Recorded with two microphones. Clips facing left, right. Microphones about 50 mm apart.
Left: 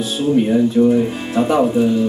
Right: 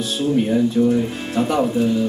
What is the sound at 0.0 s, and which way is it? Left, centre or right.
Speech, centre.